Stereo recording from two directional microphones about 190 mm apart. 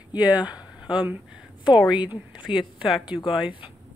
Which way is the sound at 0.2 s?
20° left (ahead or behind).